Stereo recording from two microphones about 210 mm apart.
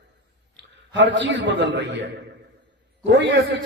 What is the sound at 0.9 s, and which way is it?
A man's voice, 60° right (ahead or behind).